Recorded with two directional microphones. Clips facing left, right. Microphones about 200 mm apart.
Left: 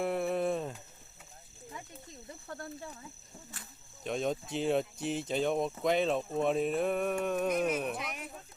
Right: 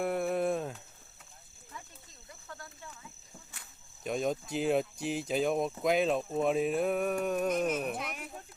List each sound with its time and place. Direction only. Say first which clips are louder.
0.0 s a sound: right 1 dB; centre (ahead or behind)
2.6 s snake: left 7 dB; 35° left (ahead or behind)
4.0 s speech: right 1 dB; 5° right (ahead or behind)